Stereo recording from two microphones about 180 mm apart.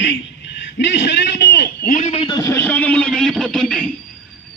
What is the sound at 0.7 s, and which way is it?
A man's voice, 85° left.